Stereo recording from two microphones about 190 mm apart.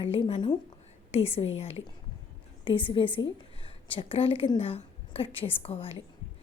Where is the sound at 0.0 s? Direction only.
30° left (ahead or behind).